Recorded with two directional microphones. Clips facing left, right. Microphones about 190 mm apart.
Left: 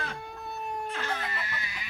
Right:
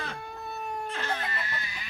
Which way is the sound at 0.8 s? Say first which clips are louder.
Right 1 dB; 10° left (ahead or behind).